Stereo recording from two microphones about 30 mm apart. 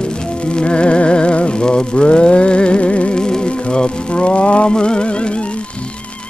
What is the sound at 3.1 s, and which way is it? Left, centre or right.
Music, left.